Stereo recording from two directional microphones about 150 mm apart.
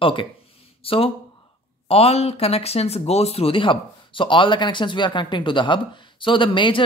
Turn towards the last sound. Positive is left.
turn(degrees=35)  # may be behind; listen again after turning